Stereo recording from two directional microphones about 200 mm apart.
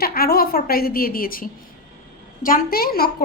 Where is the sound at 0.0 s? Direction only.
50° left (ahead or behind).